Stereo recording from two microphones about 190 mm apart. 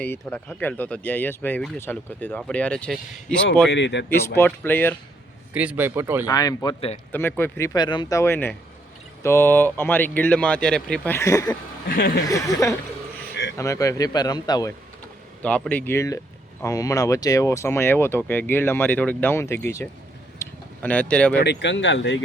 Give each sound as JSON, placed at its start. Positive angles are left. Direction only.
{"t": 0.0, "sound": "speech", "side_deg": 10}
{"t": 3.7, "sound": "speech", "side_deg": 70}
{"t": 4.4, "sound": "speech", "side_deg": 10}
{"t": 5.5, "sound": "speech", "side_deg": -10}
{"t": 6.2, "sound": "speech", "side_deg": 20}
{"t": 8.2, "sound": "speech", "side_deg": 10}
{"t": 11.9, "sound": "speech", "side_deg": 50}
{"t": 12.3, "sound": "speech", "side_deg": 15}
{"t": 15.4, "sound": "speech", "side_deg": 5}
{"t": 20.4, "sound": "a sound", "side_deg": 10}
{"t": 21.3, "sound": "speech", "side_deg": 60}